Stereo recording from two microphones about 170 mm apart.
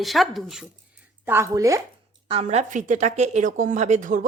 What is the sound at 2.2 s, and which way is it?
A woman's voice, 35° right (ahead or behind).